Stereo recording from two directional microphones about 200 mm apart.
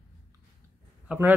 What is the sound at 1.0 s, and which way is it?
Speech, 10° right (ahead or behind).